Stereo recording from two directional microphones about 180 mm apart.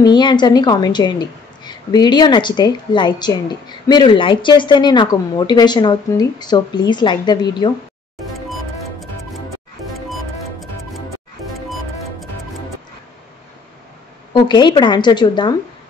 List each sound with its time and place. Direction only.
0.0 s a woman's voice: 25° left (ahead or behind)
14.3 s a woman's voice: 25° left (ahead or behind)